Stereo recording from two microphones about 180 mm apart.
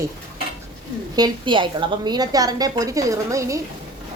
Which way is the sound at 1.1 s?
25° right (ahead or behind).